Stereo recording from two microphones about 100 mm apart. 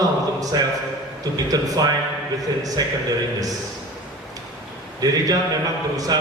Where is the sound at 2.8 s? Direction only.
40° right (ahead or behind).